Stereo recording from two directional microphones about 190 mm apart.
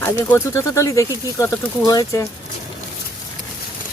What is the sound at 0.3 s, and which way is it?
Speech, 15° left (ahead or behind).